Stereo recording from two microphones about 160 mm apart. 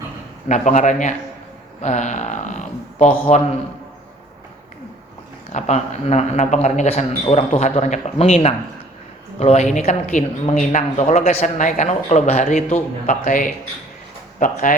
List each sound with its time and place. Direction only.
0.4 s speech: 50° left (ahead or behind)
5.5 s speech: 45° left (ahead or behind)